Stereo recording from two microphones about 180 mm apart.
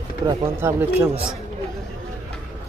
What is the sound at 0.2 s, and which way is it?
Speech, 25° right (ahead or behind).